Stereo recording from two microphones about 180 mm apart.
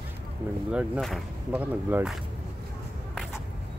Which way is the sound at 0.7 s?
Centre (ahead or behind).